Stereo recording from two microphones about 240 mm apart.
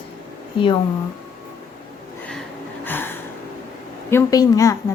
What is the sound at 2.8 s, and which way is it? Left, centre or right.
Gasp, centre.